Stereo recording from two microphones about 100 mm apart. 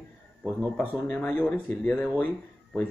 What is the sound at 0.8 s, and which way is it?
Speech, 15° left (ahead or behind).